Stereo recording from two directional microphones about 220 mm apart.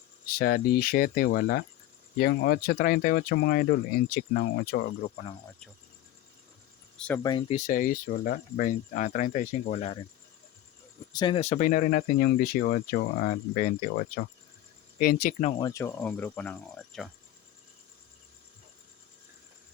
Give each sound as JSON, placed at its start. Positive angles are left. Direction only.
{"t": 0.3, "sound": "speech", "side_deg": 40}
{"t": 7.2, "sound": "speech", "side_deg": 20}
{"t": 7.5, "sound": "speech", "side_deg": 35}
{"t": 11.1, "sound": "speech", "side_deg": 20}
{"t": 15.6, "sound": "speech", "side_deg": 10}